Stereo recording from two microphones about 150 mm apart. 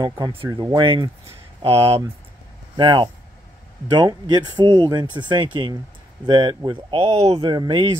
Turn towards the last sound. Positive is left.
turn(degrees=-30)  # may be behind; listen again after turning